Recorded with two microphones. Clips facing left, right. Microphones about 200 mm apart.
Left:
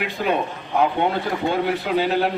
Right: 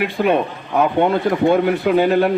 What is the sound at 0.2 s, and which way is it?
A man's voice, 55° right (ahead or behind).